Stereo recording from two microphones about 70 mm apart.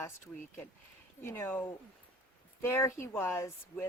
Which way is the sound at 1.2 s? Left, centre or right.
Left.